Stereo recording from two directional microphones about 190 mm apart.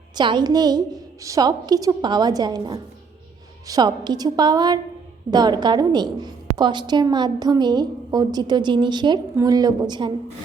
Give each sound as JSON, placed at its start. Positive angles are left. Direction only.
{"t": 0.2, "sound": "a woman's voice", "side_deg": -25}